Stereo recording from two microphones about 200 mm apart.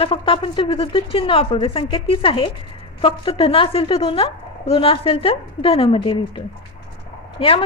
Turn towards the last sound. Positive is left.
turn(degrees=30)  # may be behind; listen again after turning